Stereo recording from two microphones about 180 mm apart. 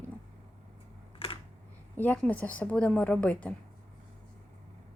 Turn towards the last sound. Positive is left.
turn(degrees=5)  # may be behind; listen again after turning